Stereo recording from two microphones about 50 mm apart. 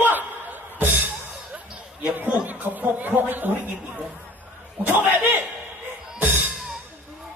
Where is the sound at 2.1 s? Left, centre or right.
Right.